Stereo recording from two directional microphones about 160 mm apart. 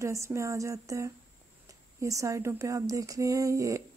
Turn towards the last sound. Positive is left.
turn(degrees=-20)  # may be behind; listen again after turning